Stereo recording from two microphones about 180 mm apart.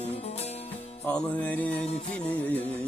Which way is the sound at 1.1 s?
10° left (ahead or behind).